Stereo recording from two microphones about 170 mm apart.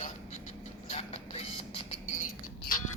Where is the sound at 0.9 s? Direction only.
35° left (ahead or behind).